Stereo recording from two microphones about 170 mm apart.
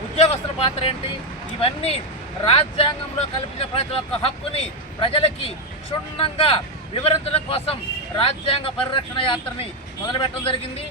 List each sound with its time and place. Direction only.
0.2 s a man's voice: 35° left (ahead or behind)